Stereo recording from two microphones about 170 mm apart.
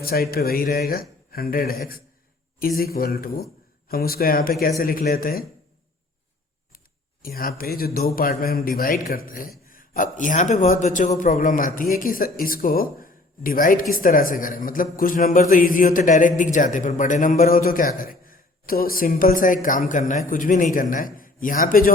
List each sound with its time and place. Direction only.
0.0 s speech: 60° left (ahead or behind)
6.7 s a man's voice: 60° left (ahead or behind)